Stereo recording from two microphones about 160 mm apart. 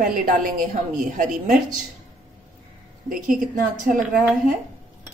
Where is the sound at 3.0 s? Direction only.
55° right (ahead or behind).